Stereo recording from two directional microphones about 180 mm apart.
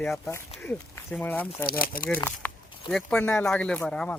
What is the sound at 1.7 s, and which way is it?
Speech, 55° left (ahead or behind).